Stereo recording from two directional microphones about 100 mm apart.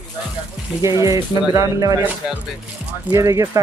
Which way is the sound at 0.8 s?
30° right (ahead or behind).